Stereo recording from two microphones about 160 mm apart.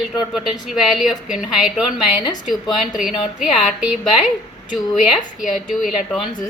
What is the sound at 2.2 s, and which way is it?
Speech, 25° left (ahead or behind).